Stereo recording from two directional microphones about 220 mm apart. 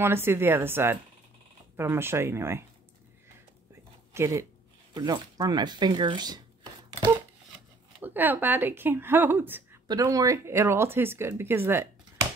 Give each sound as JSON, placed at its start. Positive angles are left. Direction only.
{"t": 0.0, "sound": "speech", "side_deg": -10}
{"t": 4.1, "sound": "speech", "side_deg": -15}
{"t": 8.0, "sound": "speech", "side_deg": -10}